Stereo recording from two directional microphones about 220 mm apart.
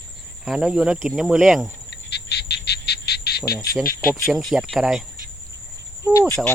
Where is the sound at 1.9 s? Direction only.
50° left (ahead or behind).